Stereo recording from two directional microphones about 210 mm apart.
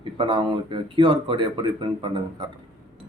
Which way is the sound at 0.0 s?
25° right (ahead or behind).